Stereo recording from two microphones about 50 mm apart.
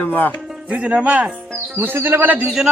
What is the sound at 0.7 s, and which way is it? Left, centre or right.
Speech, right.